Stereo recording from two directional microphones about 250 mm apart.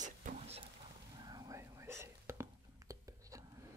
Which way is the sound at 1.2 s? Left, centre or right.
Centre.